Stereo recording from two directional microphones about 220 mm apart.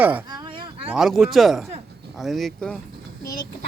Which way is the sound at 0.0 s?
5° right (ahead or behind).